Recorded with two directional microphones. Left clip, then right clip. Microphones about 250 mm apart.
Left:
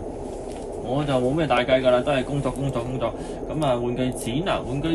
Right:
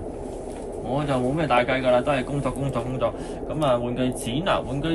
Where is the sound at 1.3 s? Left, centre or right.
Right.